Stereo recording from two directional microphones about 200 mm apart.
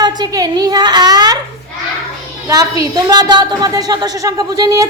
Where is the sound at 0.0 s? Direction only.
20° right (ahead or behind).